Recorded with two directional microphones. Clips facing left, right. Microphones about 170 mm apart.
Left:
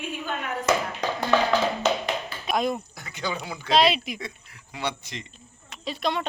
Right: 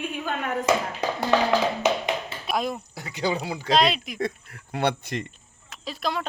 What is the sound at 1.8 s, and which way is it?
Tap, 15° right (ahead or behind).